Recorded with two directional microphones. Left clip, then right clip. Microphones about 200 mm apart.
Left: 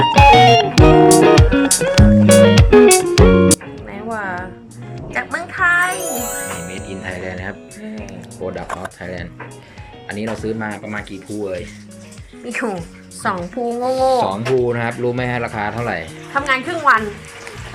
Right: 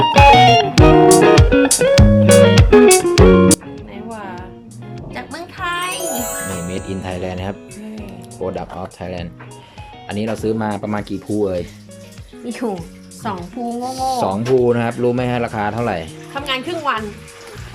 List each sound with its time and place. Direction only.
0.0 s music: centre (ahead or behind)
5.5 s music: 15° right (ahead or behind)
6.0 s music: centre (ahead or behind)
6.7 s music: 15° right (ahead or behind)
8.4 s speech: centre (ahead or behind)
10.1 s speech: 15° right (ahead or behind)
13.2 s speech: centre (ahead or behind)